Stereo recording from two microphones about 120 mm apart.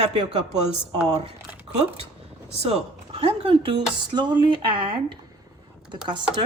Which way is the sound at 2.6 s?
60° right (ahead or behind).